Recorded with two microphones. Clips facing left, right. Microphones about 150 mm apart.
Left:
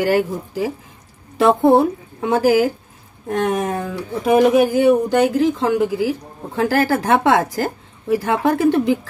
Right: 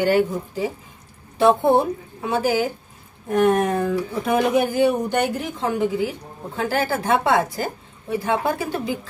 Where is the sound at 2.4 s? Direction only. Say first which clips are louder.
Left 7 dB; 90° left.